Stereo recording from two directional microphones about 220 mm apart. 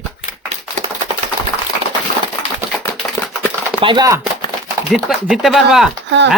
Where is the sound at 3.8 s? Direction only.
20° right (ahead or behind).